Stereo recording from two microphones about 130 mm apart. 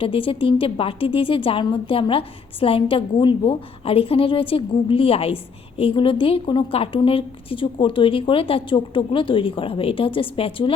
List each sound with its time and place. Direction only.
0.0 s a woman's voice: 45° left (ahead or behind)